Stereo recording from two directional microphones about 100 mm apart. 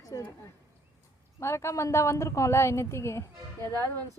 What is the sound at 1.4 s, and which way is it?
A woman's voice, 25° left (ahead or behind).